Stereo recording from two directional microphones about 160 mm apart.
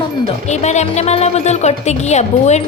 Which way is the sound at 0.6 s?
45° left (ahead or behind).